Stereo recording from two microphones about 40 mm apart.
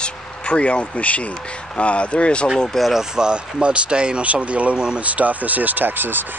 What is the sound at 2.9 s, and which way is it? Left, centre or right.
Speech, centre.